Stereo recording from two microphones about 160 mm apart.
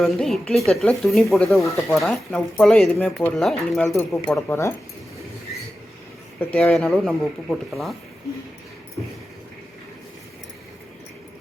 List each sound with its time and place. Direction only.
0.0 s speech: centre (ahead or behind)
4.4 s speech: 15° left (ahead or behind)
6.4 s speech: 10° left (ahead or behind)